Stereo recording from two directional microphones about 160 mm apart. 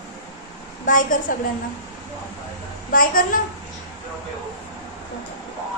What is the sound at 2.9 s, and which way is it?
Speech, 60° left (ahead or behind).